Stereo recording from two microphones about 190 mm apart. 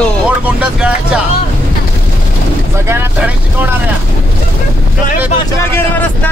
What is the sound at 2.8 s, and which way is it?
Speech, 10° right (ahead or behind).